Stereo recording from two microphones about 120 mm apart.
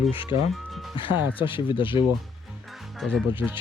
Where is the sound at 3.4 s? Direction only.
5° right (ahead or behind).